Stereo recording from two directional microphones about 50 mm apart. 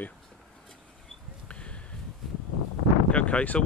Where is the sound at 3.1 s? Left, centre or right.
Left.